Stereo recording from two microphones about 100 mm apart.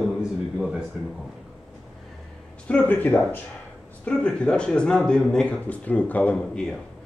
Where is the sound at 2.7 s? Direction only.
15° left (ahead or behind).